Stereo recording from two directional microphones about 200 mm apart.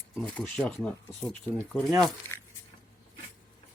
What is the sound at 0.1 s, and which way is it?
Speech, centre (ahead or behind).